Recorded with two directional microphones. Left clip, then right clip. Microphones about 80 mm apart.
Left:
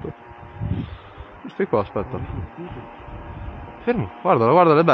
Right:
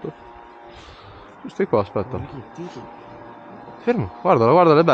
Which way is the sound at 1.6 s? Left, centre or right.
Right.